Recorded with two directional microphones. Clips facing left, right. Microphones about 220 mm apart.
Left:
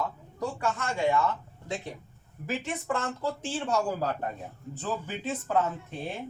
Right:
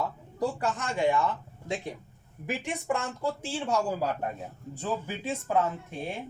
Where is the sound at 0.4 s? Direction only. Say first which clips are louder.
Right 4 dB; 30° right (ahead or behind).